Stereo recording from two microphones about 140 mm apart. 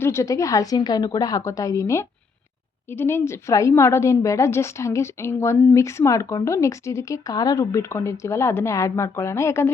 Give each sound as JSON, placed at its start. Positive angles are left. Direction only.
{"t": 0.0, "sound": "a woman's voice", "side_deg": 20}